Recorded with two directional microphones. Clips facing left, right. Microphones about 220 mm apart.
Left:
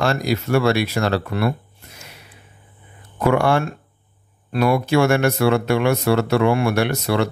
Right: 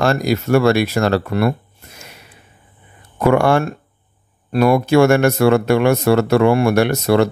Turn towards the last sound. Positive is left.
turn(degrees=-45)  # may be behind; listen again after turning